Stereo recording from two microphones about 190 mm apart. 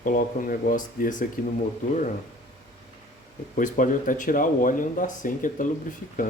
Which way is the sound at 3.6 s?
45° left (ahead or behind).